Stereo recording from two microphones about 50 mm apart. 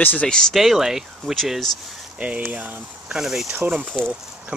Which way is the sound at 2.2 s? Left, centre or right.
Right.